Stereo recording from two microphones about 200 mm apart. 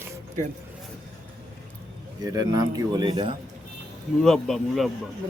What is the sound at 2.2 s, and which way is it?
Speech, 20° right (ahead or behind).